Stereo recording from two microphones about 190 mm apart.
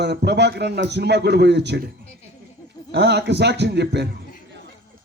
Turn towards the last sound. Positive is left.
turn(degrees=-65)  # may be behind; listen again after turning